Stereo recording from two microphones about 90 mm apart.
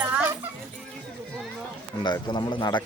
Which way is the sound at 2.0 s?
55° left (ahead or behind).